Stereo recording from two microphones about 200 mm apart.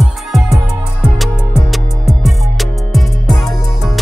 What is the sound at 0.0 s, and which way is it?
Music, centre (ahead or behind).